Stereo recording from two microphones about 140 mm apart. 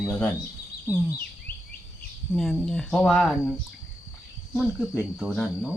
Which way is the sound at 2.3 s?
Centre (ahead or behind).